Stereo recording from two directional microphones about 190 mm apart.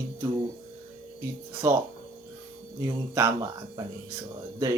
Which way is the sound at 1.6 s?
15° right (ahead or behind).